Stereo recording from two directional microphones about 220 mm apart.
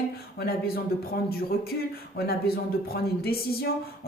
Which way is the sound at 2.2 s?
45° left (ahead or behind).